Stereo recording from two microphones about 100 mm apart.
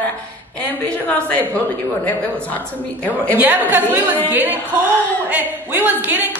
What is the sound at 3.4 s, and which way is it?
Speech, 15° right (ahead or behind).